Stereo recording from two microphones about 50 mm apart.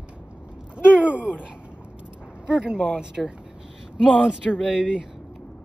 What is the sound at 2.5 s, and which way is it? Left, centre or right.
Speech, centre.